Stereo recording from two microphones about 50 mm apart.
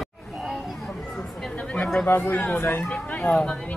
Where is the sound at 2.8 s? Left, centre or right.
Left.